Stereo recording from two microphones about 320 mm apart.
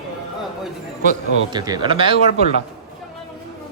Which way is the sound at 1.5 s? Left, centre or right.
Centre.